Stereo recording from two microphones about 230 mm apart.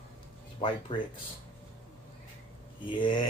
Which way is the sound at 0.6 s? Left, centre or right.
Left.